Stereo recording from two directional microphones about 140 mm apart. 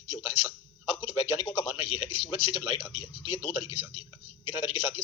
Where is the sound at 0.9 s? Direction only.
45° left (ahead or behind).